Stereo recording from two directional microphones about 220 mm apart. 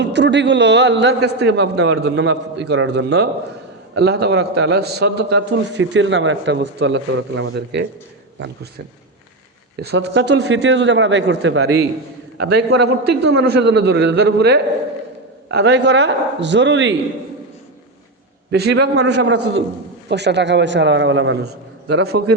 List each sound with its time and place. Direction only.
0.0 s a man's voice: 50° right (ahead or behind)
9.7 s a man's voice: 50° right (ahead or behind)
18.5 s a man's voice: 50° right (ahead or behind)